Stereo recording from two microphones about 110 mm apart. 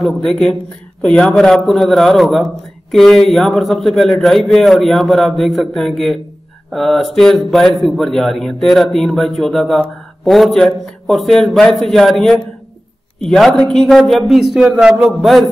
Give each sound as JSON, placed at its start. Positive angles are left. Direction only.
{"t": 0.0, "sound": "a man's voice", "side_deg": 5}